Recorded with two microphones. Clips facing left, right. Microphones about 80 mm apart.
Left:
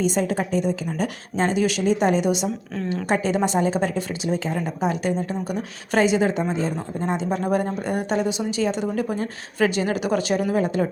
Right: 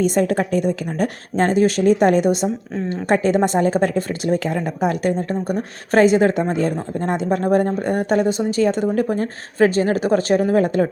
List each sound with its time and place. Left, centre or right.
0.0 s speech: right